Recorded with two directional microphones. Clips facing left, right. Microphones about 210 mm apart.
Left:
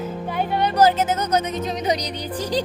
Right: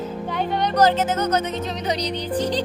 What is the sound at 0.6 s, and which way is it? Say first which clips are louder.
Speech: left 1 dB; 10° left (ahead or behind).